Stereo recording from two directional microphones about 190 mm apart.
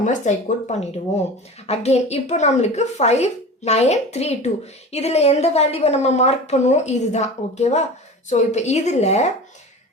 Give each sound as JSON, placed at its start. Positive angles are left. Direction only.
{"t": 0.0, "sound": "a woman's voice", "side_deg": 40}